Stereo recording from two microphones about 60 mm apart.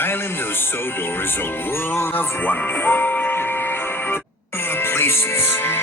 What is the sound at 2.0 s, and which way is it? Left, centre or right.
Speech, left.